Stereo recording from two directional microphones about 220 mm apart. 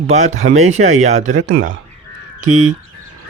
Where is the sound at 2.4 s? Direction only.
35° right (ahead or behind).